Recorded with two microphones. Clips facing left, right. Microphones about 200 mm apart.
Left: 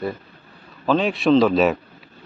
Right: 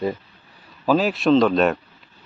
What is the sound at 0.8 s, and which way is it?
A man's voice, 5° right (ahead or behind).